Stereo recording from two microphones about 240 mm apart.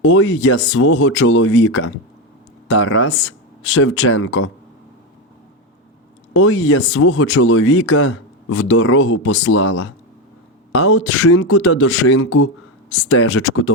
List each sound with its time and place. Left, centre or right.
0.0 s speech: left
6.3 s speech: left